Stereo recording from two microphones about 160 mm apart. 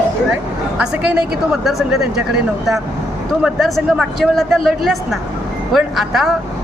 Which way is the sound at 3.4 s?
Centre (ahead or behind).